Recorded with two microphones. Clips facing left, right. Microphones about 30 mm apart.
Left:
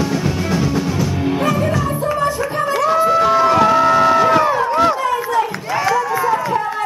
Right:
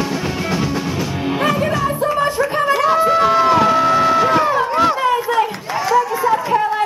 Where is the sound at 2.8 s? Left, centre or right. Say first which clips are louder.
Left 1 dB; centre.